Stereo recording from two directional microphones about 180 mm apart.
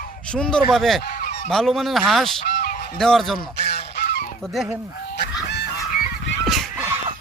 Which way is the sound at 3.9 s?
70° left (ahead or behind).